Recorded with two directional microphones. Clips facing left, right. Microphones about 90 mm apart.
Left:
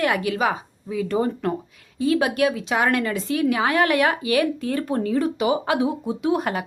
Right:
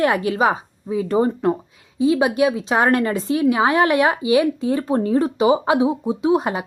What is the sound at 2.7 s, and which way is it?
Speech, 35° right (ahead or behind).